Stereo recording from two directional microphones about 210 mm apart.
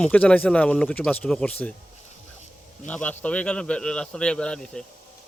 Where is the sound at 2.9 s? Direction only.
5° left (ahead or behind).